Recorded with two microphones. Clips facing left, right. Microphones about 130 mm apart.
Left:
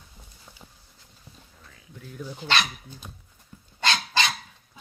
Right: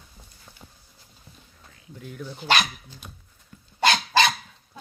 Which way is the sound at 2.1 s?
10° left (ahead or behind).